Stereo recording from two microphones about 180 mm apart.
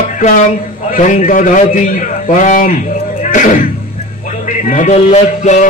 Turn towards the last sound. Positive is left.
turn(degrees=40)  # may be behind; listen again after turning